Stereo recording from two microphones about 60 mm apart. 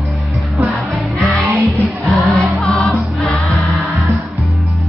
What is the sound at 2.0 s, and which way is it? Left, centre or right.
Music, centre.